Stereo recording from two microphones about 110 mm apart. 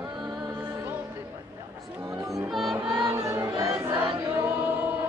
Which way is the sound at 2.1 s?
30° right (ahead or behind).